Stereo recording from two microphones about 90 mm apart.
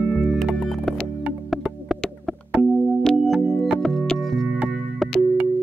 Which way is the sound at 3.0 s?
Centre (ahead or behind).